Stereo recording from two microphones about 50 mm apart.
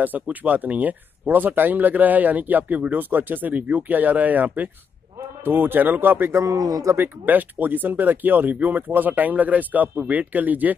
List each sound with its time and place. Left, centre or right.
0.0 s speech: right
6.3 s speech: right
7.0 s speech: right